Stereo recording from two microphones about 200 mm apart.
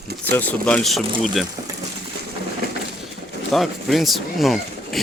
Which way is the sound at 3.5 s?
Centre (ahead or behind).